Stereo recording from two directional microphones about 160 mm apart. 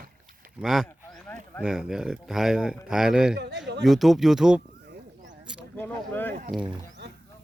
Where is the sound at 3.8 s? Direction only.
Centre (ahead or behind).